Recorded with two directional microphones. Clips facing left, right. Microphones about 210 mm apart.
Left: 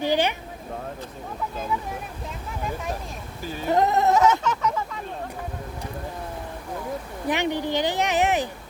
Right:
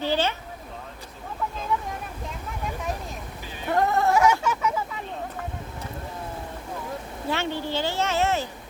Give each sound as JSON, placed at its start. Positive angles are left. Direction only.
{"t": 0.0, "sound": "speech", "side_deg": 15}
{"t": 3.7, "sound": "sheep", "side_deg": 20}
{"t": 4.1, "sound": "a sound", "side_deg": -10}
{"t": 7.3, "sound": "speech", "side_deg": 15}